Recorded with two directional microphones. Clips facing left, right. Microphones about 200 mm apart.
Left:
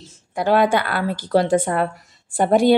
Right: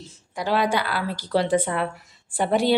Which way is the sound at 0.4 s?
55° left (ahead or behind).